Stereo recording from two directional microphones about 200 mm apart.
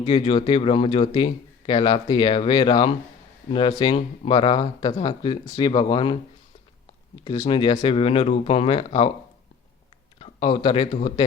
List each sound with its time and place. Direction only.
0.0 s speech: 25° left (ahead or behind)
7.3 s speech: 25° left (ahead or behind)
10.2 s speech: 30° left (ahead or behind)